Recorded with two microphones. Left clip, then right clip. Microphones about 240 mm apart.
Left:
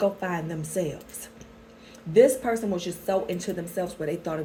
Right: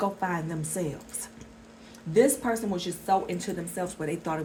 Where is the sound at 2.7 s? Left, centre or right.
Right.